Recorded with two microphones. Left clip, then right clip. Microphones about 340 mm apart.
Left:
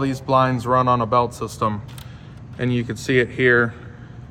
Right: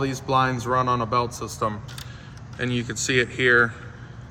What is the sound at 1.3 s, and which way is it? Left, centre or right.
A man's voice, centre.